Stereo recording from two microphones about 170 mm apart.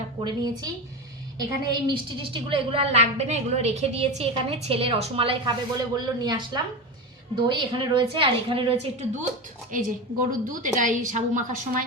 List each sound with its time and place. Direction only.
0.2 s a woman's voice: 25° right (ahead or behind)
9.7 s a woman's voice: 50° right (ahead or behind)